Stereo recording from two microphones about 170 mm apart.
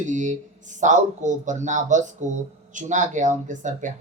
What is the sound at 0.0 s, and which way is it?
Speech, 45° right (ahead or behind).